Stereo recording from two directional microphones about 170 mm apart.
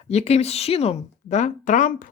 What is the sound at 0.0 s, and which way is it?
Speech, 40° left (ahead or behind).